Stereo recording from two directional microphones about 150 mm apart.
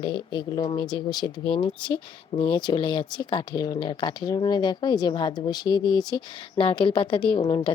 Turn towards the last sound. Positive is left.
turn(degrees=30)  # may be behind; listen again after turning